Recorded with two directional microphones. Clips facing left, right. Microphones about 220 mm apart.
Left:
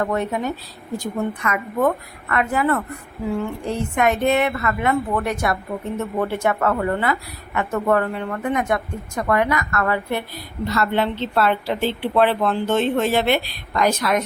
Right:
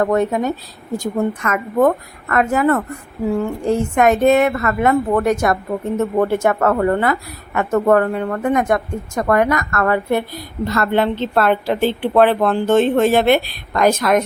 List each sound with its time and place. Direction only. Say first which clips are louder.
0.0 s a woman's voice: right 6 dB; 45° right (ahead or behind)